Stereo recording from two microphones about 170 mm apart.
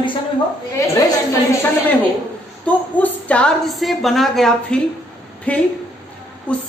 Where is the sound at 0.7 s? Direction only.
15° left (ahead or behind).